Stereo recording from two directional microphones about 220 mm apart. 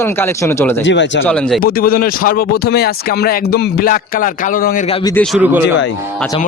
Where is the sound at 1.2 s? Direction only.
5° left (ahead or behind).